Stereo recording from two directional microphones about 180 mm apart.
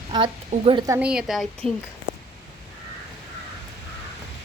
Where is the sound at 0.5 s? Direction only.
30° right (ahead or behind).